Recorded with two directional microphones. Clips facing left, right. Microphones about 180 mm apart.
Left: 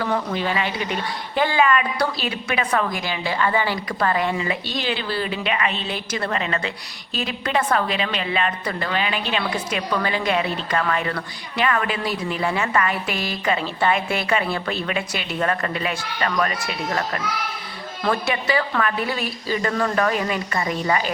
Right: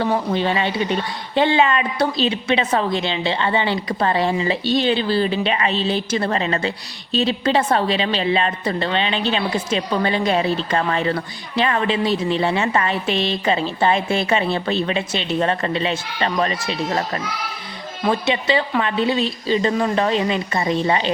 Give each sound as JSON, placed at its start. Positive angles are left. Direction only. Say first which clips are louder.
{"t": 0.0, "sound": "a woman's voice", "louder": "right 4 dB", "side_deg": -30}